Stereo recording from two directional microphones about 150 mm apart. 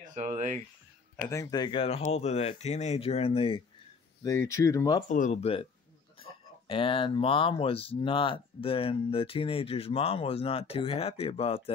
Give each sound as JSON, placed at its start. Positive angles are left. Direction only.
{"t": 0.1, "sound": "speech", "side_deg": -50}
{"t": 1.1, "sound": "speech", "side_deg": 20}
{"t": 4.2, "sound": "speech", "side_deg": 20}
{"t": 5.1, "sound": "speech", "side_deg": 55}
{"t": 6.7, "sound": "speech", "side_deg": 35}